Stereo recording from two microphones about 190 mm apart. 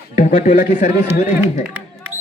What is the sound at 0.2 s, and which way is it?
Speech, 40° left (ahead or behind).